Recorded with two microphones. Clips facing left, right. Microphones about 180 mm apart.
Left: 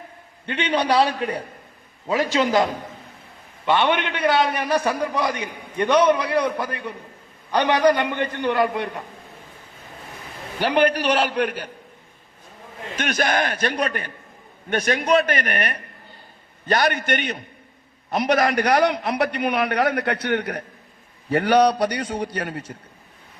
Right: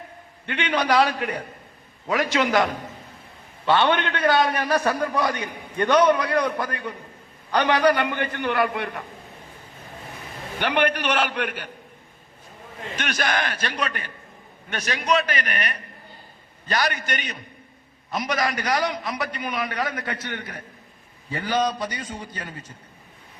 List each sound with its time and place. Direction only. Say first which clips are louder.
0.4 s a man's voice: left 2 dB; 35° left (ahead or behind)
3.7 s a man's voice: even; 15° left (ahead or behind)
7.5 s a man's voice: left 2 dB; 10° left (ahead or behind)
7.9 s a man's voice: left 1 dB; 25° left (ahead or behind)
10.6 s a man's voice: left 4 dB; 35° left (ahead or behind)
13.0 s a man's voice: left 4 dB; 45° left (ahead or behind); by 22.7 s 70° left (ahead or behind)